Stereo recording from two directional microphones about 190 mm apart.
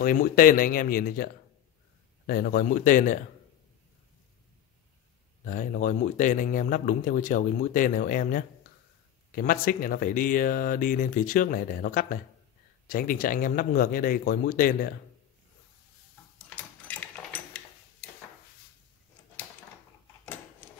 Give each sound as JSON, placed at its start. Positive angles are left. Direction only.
{"t": 0.0, "sound": "a man's voice", "side_deg": 50}
{"t": 5.4, "sound": "a man's voice", "side_deg": 45}
{"t": 16.4, "sound": "sewing machine", "side_deg": 10}